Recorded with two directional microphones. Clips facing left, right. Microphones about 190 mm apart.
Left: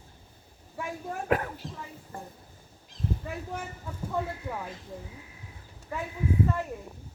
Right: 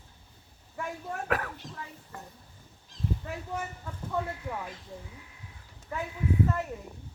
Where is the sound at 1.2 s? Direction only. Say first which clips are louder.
Left 4 dB; 25° left (ahead or behind).